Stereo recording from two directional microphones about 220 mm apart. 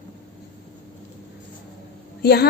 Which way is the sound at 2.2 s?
45° left (ahead or behind).